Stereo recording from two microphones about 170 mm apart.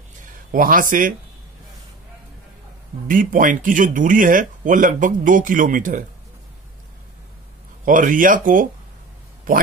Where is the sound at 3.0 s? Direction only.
50° right (ahead or behind).